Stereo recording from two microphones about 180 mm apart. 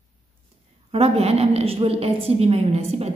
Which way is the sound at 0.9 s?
35° right (ahead or behind).